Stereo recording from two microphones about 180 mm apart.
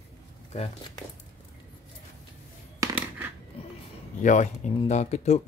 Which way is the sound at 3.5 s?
30° left (ahead or behind).